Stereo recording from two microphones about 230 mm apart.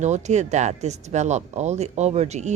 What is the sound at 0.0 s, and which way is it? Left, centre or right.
Speech, right.